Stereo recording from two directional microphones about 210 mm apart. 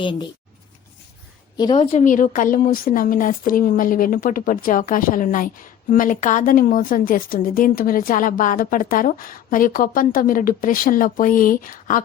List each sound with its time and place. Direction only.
0.0 s speech: 25° left (ahead or behind)
1.5 s speech: 20° left (ahead or behind); by 12.0 s 40° left (ahead or behind)